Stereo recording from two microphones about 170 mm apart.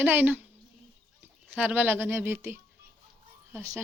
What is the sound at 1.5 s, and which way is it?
Speech, 10° right (ahead or behind).